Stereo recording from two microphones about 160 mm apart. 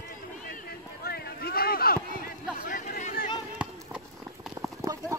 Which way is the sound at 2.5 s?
55° left (ahead or behind).